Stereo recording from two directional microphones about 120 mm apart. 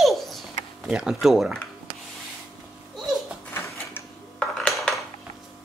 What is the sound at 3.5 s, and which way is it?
Printer, 20° left (ahead or behind).